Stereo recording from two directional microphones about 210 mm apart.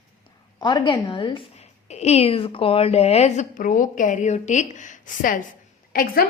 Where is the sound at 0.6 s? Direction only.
20° left (ahead or behind).